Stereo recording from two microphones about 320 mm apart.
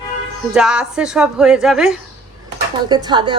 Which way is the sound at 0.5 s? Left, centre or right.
Centre.